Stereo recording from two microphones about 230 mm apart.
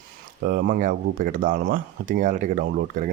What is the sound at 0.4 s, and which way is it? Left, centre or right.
Speech, right.